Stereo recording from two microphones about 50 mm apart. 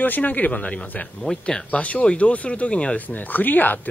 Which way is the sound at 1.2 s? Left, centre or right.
Centre.